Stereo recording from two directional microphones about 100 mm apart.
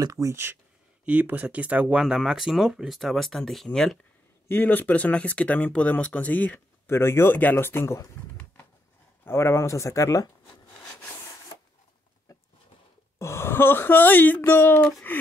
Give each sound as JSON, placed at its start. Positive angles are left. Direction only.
{"t": 0.0, "sound": "speech", "side_deg": -30}
{"t": 1.0, "sound": "speech", "side_deg": -15}
{"t": 4.5, "sound": "speech", "side_deg": 20}
{"t": 9.2, "sound": "speech", "side_deg": 25}
{"t": 12.3, "sound": "a sound", "side_deg": 35}
{"t": 13.2, "sound": "speech", "side_deg": 25}